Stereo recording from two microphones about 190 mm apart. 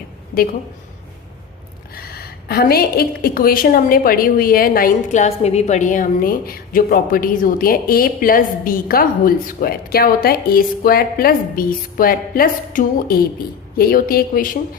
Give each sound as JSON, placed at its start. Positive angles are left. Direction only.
{"t": 2.0, "sound": "a woman's voice", "side_deg": 55}